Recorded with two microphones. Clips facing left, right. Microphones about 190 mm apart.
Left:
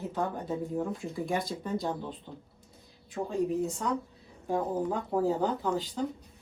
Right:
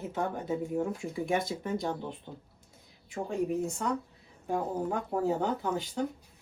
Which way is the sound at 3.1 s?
Centre (ahead or behind).